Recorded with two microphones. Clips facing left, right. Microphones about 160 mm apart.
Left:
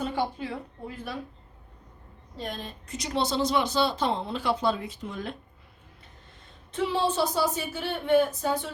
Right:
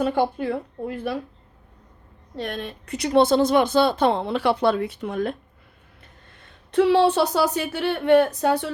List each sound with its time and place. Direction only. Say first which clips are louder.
0.0 s speech: right 8 dB; 60° right (ahead or behind)
2.3 s speech: right 6 dB; 70° right (ahead or behind)
6.3 s speech: right 16 dB; 70° right (ahead or behind)